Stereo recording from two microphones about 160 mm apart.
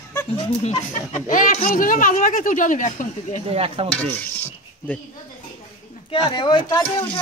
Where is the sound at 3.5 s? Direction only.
35° right (ahead or behind).